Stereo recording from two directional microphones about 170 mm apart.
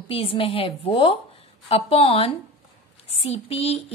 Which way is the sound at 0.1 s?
30° left (ahead or behind).